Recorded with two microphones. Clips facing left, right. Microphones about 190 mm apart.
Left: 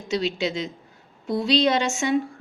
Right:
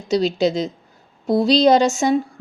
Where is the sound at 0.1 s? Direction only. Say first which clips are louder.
Right 7 dB; 40° right (ahead or behind).